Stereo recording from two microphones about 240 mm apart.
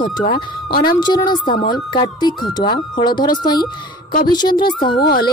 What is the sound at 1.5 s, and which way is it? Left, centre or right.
Speech, left.